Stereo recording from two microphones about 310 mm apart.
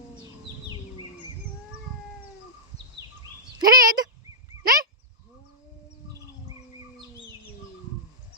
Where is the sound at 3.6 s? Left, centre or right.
Centre.